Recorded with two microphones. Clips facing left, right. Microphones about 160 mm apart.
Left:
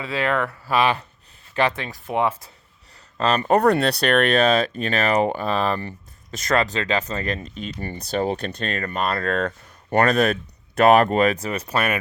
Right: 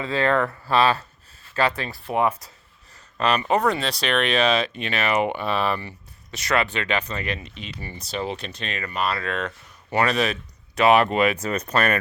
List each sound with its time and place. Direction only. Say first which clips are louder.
0.0 s speech: right 2 dB; 10° left (ahead or behind)
3.2 s speech: left 3 dB; 45° left (ahead or behind)
11.3 s speech: right 1 dB; 10° left (ahead or behind)